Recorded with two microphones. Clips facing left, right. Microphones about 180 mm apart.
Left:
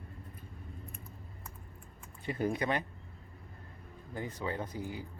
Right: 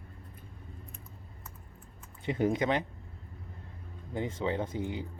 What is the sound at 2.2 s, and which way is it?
Speech, 20° right (ahead or behind).